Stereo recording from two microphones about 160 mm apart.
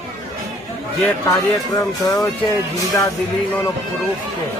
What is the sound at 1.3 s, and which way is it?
Speech, 20° left (ahead or behind).